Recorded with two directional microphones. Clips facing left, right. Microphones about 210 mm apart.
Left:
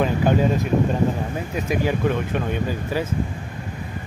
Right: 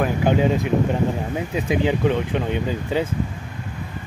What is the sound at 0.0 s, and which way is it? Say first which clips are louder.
Speech: even; 15° right (ahead or behind).